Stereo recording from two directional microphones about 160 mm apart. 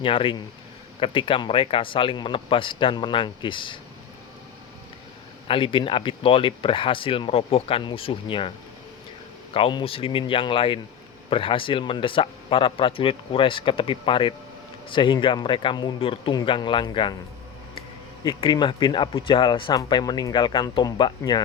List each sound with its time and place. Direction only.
0.0 s speech: 35° left (ahead or behind)
5.5 s speech: 35° left (ahead or behind)
18.3 s speech: 30° left (ahead or behind)